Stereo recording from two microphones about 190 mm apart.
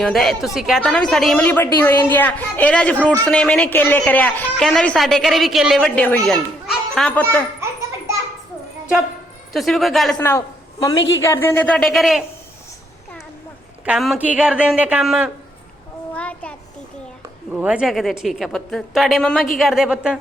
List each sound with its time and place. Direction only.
0.0 s a woman's voice: centre (ahead or behind)
7.6 s a sound: 15° right (ahead or behind)
9.5 s a woman's voice: centre (ahead or behind)
10.2 s a woman's voice: 10° left (ahead or behind)
13.8 s speech: centre (ahead or behind)
16.1 s child singing: 5° left (ahead or behind)
17.5 s a woman's voice: 5° right (ahead or behind)